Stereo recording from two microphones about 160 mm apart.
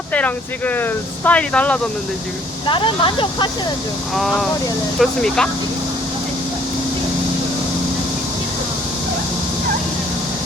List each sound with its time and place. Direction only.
0.1 s speech: 10° left (ahead or behind)
2.6 s speech: 30° left (ahead or behind)
4.1 s speech: centre (ahead or behind)